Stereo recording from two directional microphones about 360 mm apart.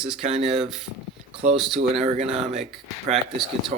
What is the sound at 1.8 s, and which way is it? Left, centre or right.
Speech, centre.